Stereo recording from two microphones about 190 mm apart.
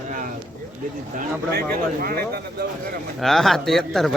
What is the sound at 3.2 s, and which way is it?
Speech, centre (ahead or behind).